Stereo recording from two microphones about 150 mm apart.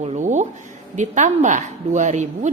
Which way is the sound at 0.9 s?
55° right (ahead or behind).